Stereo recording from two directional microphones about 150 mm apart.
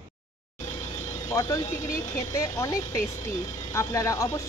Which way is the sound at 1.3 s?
20° left (ahead or behind).